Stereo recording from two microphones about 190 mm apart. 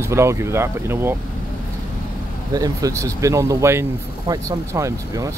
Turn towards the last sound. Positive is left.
turn(degrees=-15)  # may be behind; listen again after turning